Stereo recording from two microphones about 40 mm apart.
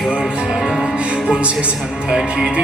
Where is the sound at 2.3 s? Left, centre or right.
Right.